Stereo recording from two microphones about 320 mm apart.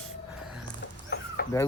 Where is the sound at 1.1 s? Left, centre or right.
Left.